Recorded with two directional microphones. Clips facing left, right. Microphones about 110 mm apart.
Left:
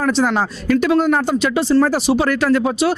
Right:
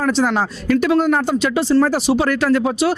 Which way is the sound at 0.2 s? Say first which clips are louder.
Even; 20° left (ahead or behind).